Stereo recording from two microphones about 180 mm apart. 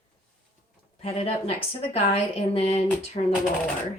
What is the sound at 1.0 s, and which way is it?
Speech, 35° left (ahead or behind).